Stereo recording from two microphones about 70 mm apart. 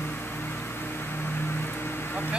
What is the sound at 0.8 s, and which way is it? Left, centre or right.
Vehicle, left.